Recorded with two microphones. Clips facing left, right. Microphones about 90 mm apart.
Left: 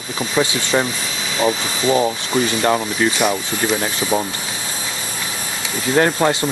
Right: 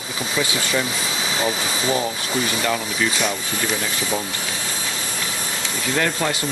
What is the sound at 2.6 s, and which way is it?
Speech, 45° left (ahead or behind).